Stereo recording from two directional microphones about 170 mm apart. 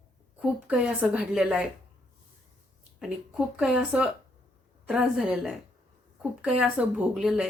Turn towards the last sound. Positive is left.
turn(degrees=-5)  # may be behind; listen again after turning